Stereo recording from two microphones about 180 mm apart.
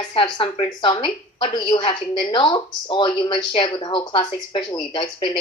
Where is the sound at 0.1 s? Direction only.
30° left (ahead or behind).